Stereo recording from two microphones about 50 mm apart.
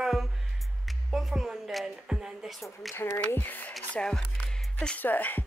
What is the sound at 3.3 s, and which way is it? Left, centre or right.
Music, left.